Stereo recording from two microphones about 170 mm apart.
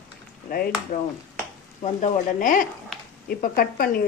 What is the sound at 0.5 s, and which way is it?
Speech, 55° left (ahead or behind).